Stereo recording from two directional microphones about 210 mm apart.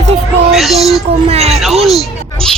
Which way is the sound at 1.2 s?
30° right (ahead or behind).